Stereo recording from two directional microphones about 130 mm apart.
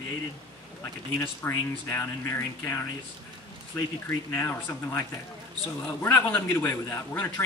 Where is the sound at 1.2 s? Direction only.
20° left (ahead or behind).